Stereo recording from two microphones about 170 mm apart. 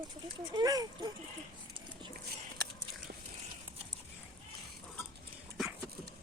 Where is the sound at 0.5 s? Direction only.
20° right (ahead or behind).